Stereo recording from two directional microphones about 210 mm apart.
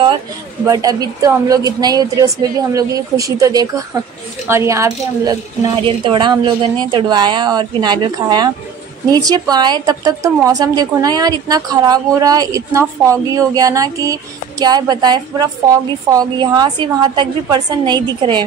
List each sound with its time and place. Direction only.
0.7 s a woman's voice: 15° right (ahead or behind)